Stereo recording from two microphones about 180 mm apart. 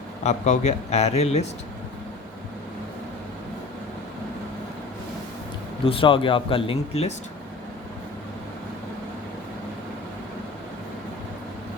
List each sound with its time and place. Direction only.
0.2 s speech: 40° left (ahead or behind)
5.8 s speech: 30° left (ahead or behind)